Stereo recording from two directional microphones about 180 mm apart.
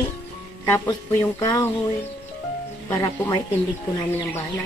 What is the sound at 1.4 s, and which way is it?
Speech, 20° left (ahead or behind).